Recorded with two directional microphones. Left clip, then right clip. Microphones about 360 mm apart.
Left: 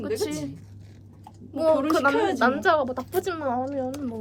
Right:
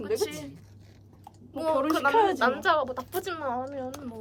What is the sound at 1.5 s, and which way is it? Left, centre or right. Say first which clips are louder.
A woman's voice: left 5 dB; centre.